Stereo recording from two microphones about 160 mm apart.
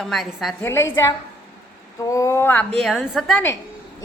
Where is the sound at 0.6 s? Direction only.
15° left (ahead or behind); by 3.4 s centre (ahead or behind).